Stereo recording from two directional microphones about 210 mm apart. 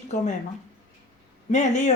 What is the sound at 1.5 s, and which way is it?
Speech, 35° left (ahead or behind).